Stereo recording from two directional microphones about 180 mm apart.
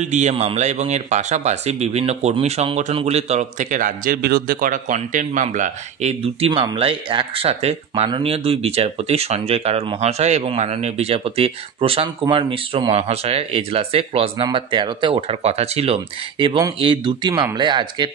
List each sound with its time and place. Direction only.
0.0 s speech: 40° right (ahead or behind)